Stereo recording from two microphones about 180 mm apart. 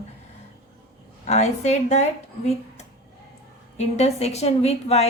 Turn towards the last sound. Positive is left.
turn(degrees=35)  # may be behind; listen again after turning